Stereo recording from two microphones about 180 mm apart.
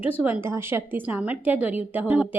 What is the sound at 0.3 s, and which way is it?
A woman's voice, 15° right (ahead or behind).